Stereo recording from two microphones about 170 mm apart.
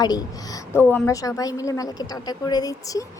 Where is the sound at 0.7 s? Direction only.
10° left (ahead or behind).